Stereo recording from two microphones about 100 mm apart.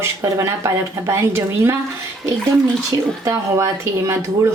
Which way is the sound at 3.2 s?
30° right (ahead or behind).